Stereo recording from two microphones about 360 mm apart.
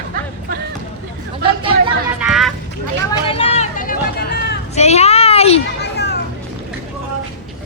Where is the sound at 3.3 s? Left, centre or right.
Centre.